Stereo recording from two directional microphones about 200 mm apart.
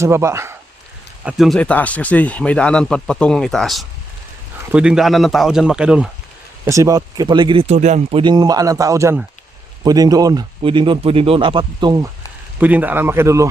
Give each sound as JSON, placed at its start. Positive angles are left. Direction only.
{"t": 0.0, "sound": "speech", "side_deg": -15}
{"t": 1.2, "sound": "speech", "side_deg": -5}
{"t": 6.7, "sound": "speech", "side_deg": -15}
{"t": 12.5, "sound": "speech", "side_deg": -10}